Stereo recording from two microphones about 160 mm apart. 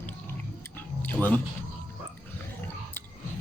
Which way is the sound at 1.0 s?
10° left (ahead or behind).